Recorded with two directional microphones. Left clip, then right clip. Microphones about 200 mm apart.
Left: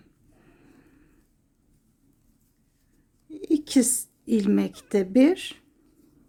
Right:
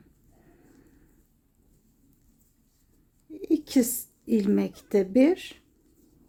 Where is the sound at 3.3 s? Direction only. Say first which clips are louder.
Left 2 dB; 5° left (ahead or behind).